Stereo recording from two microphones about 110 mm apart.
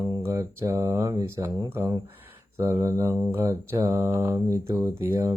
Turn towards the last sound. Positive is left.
turn(degrees=-25)  # may be behind; listen again after turning